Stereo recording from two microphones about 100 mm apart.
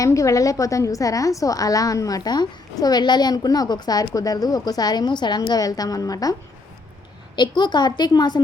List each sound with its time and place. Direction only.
0.0 s a woman's voice: 30° left (ahead or behind)
7.3 s a woman's voice: 50° left (ahead or behind)